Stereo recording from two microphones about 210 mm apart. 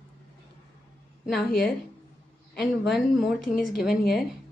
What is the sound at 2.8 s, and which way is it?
Speech, centre (ahead or behind).